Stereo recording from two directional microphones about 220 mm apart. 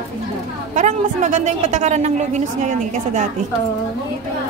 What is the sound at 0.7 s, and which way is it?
A woman's voice, 35° right (ahead or behind).